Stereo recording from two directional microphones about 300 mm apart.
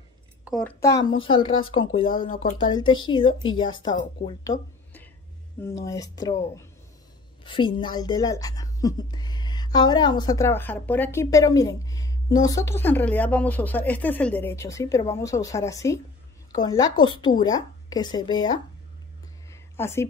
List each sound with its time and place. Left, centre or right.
0.5 s speech: centre
2.1 s speech: left
2.7 s speech: centre
3.9 s speech: left
4.5 s a sound: centre
5.6 s speech: centre
19.5 s a sound: centre